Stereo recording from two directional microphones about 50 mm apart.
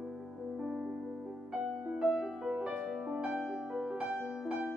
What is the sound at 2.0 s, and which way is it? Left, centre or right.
Music, centre.